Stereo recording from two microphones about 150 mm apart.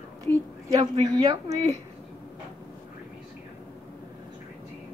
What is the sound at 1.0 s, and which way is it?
Speech, 25° right (ahead or behind).